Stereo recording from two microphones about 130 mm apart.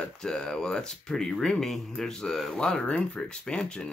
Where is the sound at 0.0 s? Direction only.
5° left (ahead or behind).